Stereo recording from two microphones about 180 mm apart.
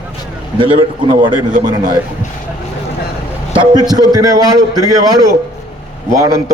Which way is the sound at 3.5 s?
25° right (ahead or behind).